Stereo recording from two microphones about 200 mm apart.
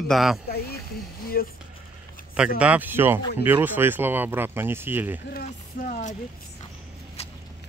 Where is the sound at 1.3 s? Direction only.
45° left (ahead or behind).